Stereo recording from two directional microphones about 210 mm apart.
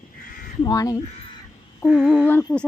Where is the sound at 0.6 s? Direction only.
15° left (ahead or behind).